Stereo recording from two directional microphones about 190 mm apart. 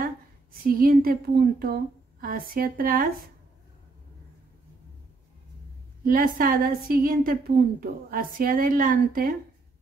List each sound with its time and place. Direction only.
0.0 s speech: 50° right (ahead or behind)
6.0 s a woman's voice: 45° right (ahead or behind)